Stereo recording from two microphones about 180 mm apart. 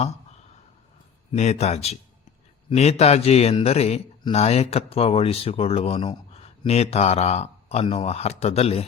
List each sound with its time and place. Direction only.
1.3 s a man's voice: 40° left (ahead or behind)